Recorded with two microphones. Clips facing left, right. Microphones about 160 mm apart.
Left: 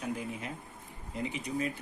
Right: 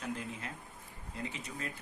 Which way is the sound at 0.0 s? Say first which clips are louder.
Left 4 dB; 10° left (ahead or behind).